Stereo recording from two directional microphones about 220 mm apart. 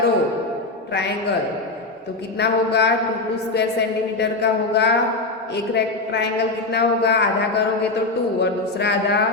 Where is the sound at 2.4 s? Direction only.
50° left (ahead or behind).